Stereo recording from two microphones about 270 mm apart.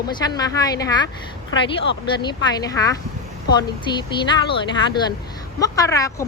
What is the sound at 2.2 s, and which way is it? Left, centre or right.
A woman's voice, centre.